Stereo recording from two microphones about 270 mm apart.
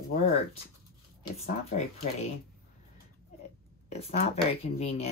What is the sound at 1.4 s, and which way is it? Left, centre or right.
Speech, left.